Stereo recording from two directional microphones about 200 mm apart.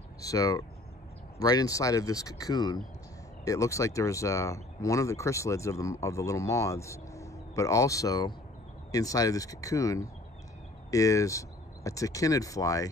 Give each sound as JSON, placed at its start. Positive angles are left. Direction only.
{"t": 0.2, "sound": "speech", "side_deg": 15}